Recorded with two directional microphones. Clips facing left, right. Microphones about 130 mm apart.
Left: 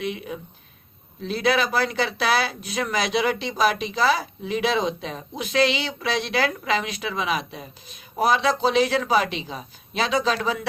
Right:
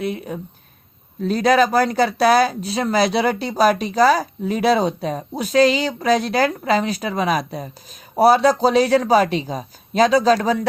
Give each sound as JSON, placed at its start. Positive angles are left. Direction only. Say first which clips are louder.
{"t": 0.0, "sound": "speech", "louder": "right 4 dB", "side_deg": -40}